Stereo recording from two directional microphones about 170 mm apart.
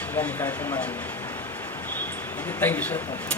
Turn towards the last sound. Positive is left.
turn(degrees=10)  # may be behind; listen again after turning